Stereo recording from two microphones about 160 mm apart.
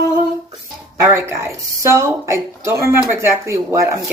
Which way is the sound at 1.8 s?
15° right (ahead or behind).